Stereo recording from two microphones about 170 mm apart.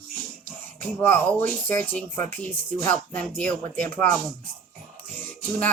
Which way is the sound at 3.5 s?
50° right (ahead or behind).